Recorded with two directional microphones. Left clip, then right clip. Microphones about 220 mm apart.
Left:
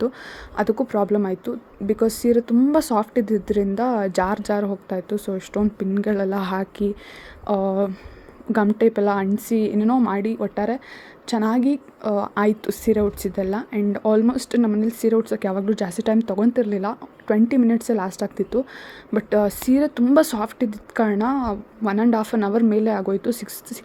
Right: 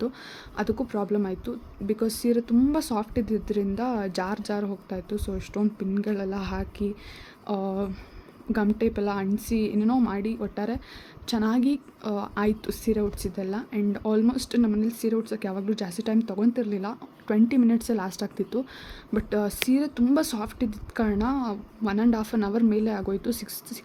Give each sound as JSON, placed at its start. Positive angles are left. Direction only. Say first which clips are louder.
{"t": 0.5, "sound": "speech", "louder": "left 8 dB", "side_deg": 15}